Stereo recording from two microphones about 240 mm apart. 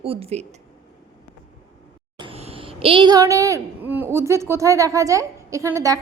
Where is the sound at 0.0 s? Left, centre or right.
Right.